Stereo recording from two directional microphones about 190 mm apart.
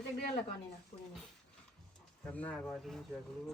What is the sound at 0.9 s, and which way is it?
Speech, 35° left (ahead or behind).